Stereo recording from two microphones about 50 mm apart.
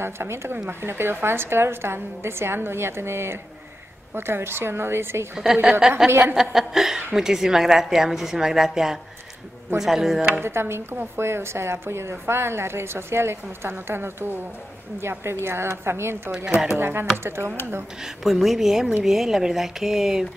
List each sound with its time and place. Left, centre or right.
0.0 s a woman's voice: right
5.3 s a woman's voice: centre
6.0 s a woman's voice: right
6.3 s a woman's voice: centre
10.3 s a woman's voice: right
18.0 s a woman's voice: centre